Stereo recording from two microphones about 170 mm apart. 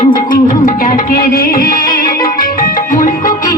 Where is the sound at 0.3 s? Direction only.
55° left (ahead or behind).